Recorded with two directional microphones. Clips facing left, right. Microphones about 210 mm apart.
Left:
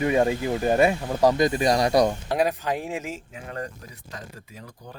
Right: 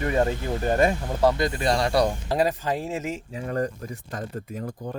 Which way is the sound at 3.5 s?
45° right (ahead or behind).